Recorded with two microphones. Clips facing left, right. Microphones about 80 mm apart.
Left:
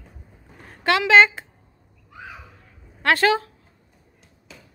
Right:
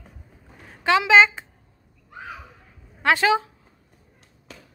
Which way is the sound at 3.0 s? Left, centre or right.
Centre.